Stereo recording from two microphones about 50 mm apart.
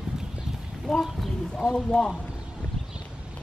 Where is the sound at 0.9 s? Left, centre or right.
Centre.